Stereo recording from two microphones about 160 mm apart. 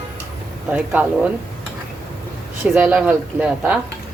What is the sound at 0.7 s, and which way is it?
Speech, 5° right (ahead or behind).